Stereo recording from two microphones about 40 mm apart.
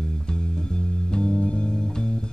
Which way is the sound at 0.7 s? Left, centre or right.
Left.